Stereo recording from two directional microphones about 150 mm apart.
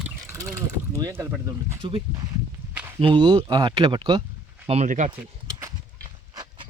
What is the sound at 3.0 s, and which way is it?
Speech, 30° right (ahead or behind).